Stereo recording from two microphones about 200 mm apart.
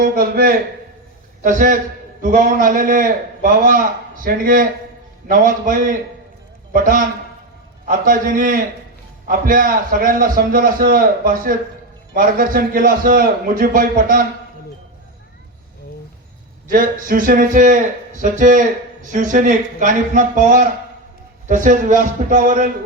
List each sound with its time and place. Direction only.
0.0 s a man's voice: 45° right (ahead or behind)
16.6 s a man's voice: 45° right (ahead or behind)